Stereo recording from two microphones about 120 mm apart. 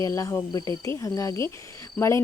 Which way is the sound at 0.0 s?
25° left (ahead or behind).